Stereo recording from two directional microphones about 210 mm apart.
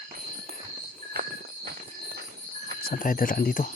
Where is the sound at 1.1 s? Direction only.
45° right (ahead or behind).